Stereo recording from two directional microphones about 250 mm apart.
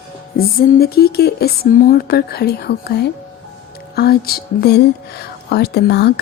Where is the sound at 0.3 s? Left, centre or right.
Left.